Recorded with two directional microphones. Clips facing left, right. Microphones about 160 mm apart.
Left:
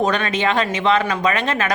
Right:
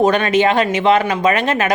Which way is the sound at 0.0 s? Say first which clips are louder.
Right 6 dB; 30° right (ahead or behind).